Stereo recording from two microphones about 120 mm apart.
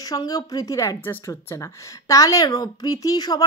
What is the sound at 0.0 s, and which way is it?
Speech, 30° left (ahead or behind).